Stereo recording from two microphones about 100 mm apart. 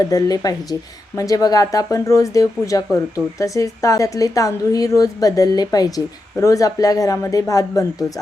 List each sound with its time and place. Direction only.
0.0 s a woman's voice: 40° left (ahead or behind)